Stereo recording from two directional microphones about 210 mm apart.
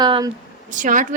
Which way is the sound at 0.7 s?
40° right (ahead or behind).